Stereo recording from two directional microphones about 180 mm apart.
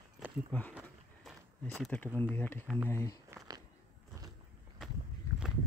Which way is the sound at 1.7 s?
5° left (ahead or behind).